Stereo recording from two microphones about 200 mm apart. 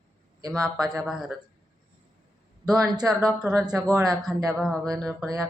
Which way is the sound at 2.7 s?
5° right (ahead or behind).